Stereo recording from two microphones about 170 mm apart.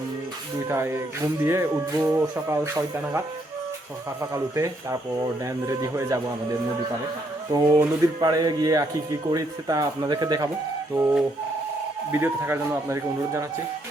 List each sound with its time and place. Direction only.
0.7 s speech: 15° right (ahead or behind)
7.5 s speech: 20° right (ahead or behind)